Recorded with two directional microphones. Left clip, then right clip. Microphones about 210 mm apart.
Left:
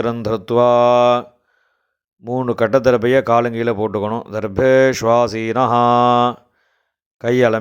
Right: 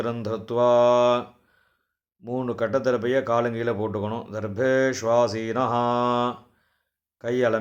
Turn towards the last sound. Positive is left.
turn(degrees=35)  # may be behind; listen again after turning